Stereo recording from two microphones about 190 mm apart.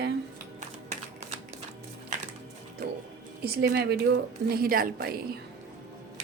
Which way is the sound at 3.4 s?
60° right (ahead or behind).